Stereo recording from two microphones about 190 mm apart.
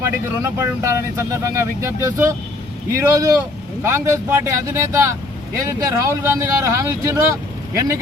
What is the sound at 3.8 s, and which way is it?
Speech, 15° right (ahead or behind).